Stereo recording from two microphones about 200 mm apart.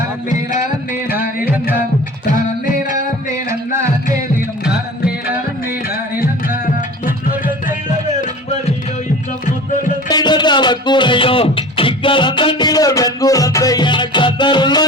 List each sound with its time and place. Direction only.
10.1 s music: 20° left (ahead or behind)